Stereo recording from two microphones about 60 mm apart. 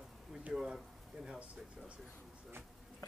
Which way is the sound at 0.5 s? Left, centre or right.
Centre.